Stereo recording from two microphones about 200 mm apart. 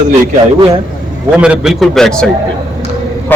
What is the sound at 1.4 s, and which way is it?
Speech, 5° right (ahead or behind).